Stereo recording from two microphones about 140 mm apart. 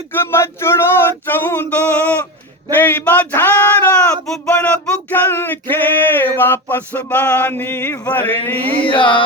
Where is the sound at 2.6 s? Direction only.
15° left (ahead or behind).